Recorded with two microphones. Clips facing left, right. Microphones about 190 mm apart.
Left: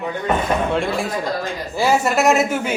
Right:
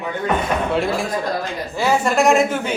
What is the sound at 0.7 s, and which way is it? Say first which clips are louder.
A man's voice: right 1 dB; centre (ahead or behind).